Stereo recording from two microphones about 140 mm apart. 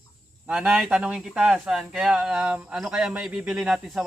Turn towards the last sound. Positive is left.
turn(degrees=0)  # may be behind; listen again after turning